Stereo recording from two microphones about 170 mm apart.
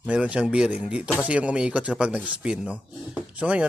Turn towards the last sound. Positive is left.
turn(degrees=-10)  # may be behind; listen again after turning